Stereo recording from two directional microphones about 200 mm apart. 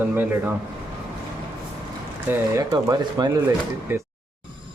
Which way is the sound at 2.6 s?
15° right (ahead or behind).